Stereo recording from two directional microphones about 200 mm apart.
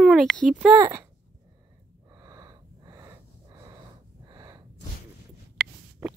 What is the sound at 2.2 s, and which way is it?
Gasp, 20° right (ahead or behind).